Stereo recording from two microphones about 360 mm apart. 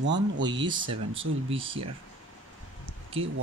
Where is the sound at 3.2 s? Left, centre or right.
Centre.